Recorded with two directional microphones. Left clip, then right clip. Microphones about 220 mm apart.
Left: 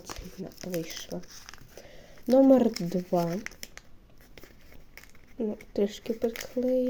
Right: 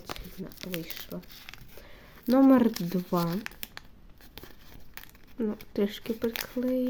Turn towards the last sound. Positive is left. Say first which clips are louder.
# left 3 dB
turn(degrees=-15)  # may be behind; listen again after turning